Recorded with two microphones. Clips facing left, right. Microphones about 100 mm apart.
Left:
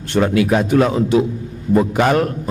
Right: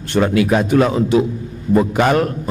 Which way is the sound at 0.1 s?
15° right (ahead or behind).